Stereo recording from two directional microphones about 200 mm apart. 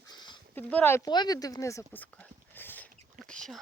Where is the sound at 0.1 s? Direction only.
20° left (ahead or behind).